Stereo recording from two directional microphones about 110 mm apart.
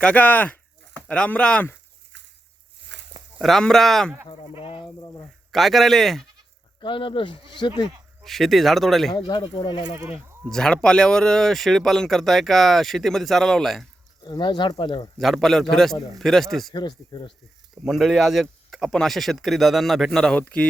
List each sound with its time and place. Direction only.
0.0 s speech: 15° left (ahead or behind)
3.4 s speech: 5° left (ahead or behind)
4.6 s speech: 50° left (ahead or behind)
5.5 s speech: centre (ahead or behind)
6.7 s speech: 50° left (ahead or behind)
8.2 s speech: centre (ahead or behind)
9.1 s speech: 45° left (ahead or behind)
10.5 s speech: 5° left (ahead or behind)
14.2 s speech: 40° left (ahead or behind)
15.2 s speech: centre (ahead or behind)
16.7 s speech: 40° left (ahead or behind)
17.8 s speech: centre (ahead or behind)